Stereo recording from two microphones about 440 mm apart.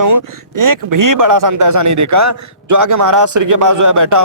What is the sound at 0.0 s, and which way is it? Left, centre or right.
Speech, right.